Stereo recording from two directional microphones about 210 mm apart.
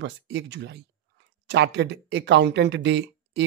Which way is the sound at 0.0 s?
55° right (ahead or behind).